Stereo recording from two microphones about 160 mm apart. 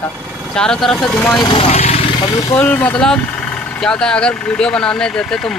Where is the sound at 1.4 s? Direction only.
35° left (ahead or behind).